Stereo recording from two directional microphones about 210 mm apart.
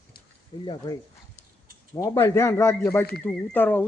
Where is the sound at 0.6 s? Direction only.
20° left (ahead or behind).